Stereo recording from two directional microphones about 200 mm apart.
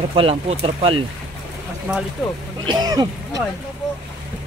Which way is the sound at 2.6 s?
20° right (ahead or behind).